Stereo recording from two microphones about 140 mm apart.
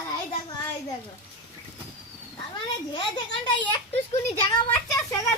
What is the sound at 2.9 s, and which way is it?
Speech, 30° left (ahead or behind).